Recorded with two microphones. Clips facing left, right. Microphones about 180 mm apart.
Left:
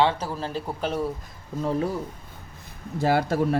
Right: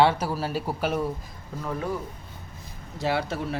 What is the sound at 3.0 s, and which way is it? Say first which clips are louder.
Speech: left 5 dB; 45° left (ahead or behind).